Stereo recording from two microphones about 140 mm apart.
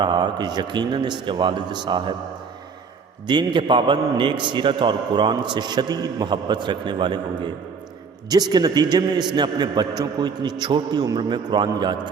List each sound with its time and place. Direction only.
0.0 s a man's voice: 30° right (ahead or behind)
3.2 s a man's voice: 35° right (ahead or behind)